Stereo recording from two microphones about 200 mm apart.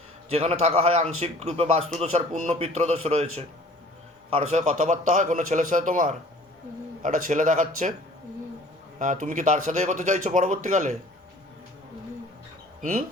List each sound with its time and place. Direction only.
0.3 s speech: 30° right (ahead or behind)
4.5 s speech: 35° right (ahead or behind)
9.0 s speech: 40° right (ahead or behind)
12.8 s speech: 40° right (ahead or behind)